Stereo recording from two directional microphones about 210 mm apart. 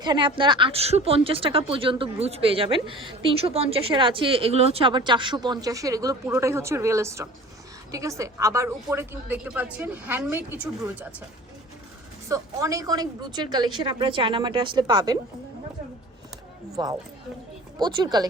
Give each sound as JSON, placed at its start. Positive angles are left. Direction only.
{"t": 0.0, "sound": "a woman's voice", "side_deg": -20}
{"t": 12.3, "sound": "speech", "side_deg": -15}
{"t": 16.7, "sound": "a woman's voice", "side_deg": -15}